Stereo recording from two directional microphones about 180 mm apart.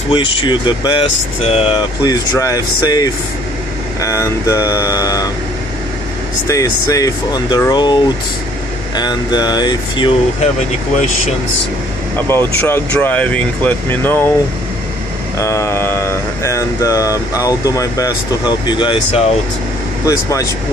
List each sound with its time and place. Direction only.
0.1 s speech: 30° left (ahead or behind)
2.0 s speech: 20° left (ahead or behind)
6.4 s speech: 20° left (ahead or behind)
12.3 s speech: 10° left (ahead or behind)
15.3 s speech: 15° left (ahead or behind)